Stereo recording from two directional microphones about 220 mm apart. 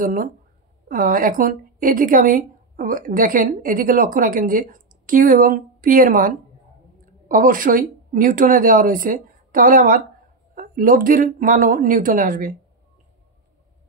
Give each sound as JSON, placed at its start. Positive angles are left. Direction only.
{"t": 0.0, "sound": "a woman's voice", "side_deg": -40}